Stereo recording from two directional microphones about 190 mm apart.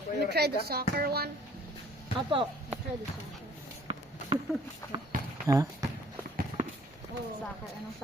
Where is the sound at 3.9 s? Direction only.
30° right (ahead or behind).